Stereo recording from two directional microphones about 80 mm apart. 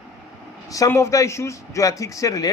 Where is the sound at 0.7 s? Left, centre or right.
Left.